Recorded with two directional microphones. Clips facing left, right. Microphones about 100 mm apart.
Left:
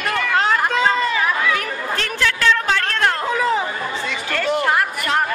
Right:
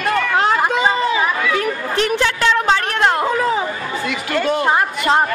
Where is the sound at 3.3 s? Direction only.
5° right (ahead or behind).